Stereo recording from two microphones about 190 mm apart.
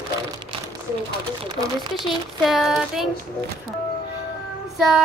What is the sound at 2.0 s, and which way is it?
Child singing, centre (ahead or behind).